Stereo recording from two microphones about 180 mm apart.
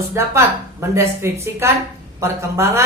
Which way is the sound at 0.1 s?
15° right (ahead or behind).